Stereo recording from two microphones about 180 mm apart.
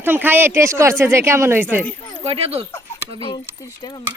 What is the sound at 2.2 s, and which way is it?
Speech, 35° right (ahead or behind).